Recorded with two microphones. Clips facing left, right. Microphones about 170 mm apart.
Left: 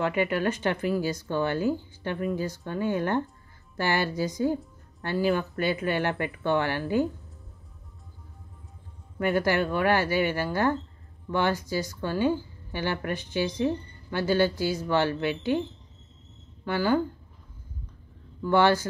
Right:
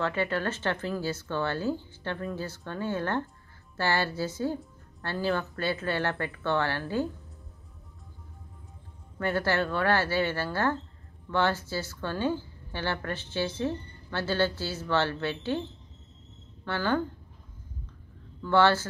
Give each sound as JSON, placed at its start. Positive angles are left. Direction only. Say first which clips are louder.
{"t": 0.0, "sound": "speech", "louder": "left 3 dB", "side_deg": 15}
{"t": 9.2, "sound": "speech", "louder": "left 3 dB", "side_deg": 15}
{"t": 16.6, "sound": "speech", "louder": "left 4 dB", "side_deg": 10}
{"t": 18.4, "sound": "speech", "louder": "left 1 dB", "side_deg": 15}